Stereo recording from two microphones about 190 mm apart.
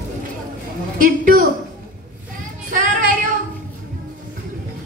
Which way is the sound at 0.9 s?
45° right (ahead or behind).